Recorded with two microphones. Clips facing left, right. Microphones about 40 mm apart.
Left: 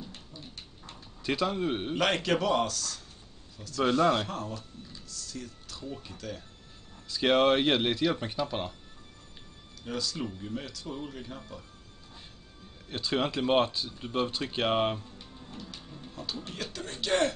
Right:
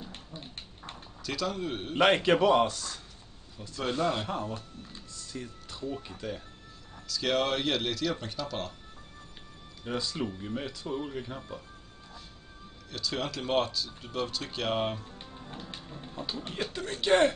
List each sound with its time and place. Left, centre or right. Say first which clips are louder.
0.1 s dog: right 2 dB; right
1.2 s speech: left 4 dB; left
2.0 s a man's voice: right 6 dB; right
4.0 s speech: left 3 dB; left
4.3 s speech: right 2 dB; right
7.1 s speech: left 5 dB; left
9.8 s speech: right 1 dB; right
12.9 s speech: left 4 dB; left
15.0 s music: right 2 dB; right
15.8 s speech: right 3 dB; right